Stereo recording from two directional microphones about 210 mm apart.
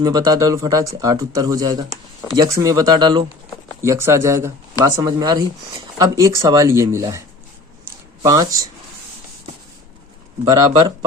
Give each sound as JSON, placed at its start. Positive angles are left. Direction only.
{"t": 0.0, "sound": "speech", "side_deg": -20}
{"t": 10.5, "sound": "speech", "side_deg": -20}